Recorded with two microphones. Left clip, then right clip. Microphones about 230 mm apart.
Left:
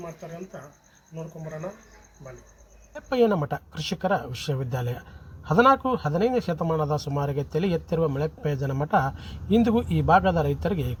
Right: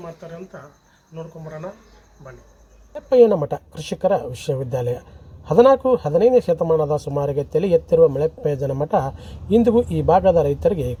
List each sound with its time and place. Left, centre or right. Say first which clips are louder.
0.0 s speech: right 3 dB; centre
2.9 s a man's voice: right 9 dB; left